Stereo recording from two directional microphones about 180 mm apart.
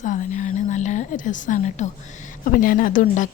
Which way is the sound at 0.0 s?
45° left (ahead or behind).